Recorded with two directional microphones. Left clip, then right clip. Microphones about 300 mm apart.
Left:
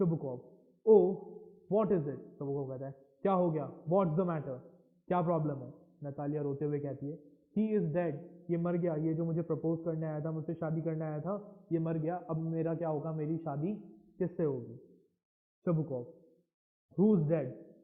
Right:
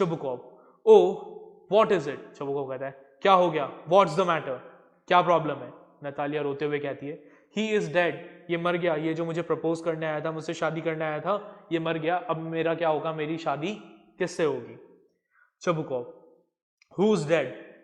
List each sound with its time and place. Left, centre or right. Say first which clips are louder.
0.0 s a man's voice: right 7 dB; centre
1.7 s a man's voice: right 9 dB; centre